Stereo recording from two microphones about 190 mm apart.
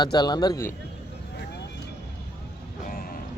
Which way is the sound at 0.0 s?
20° left (ahead or behind).